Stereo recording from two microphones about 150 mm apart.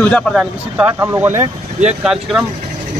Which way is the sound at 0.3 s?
5° right (ahead or behind).